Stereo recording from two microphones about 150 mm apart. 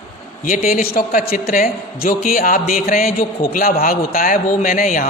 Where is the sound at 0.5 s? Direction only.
70° left (ahead or behind).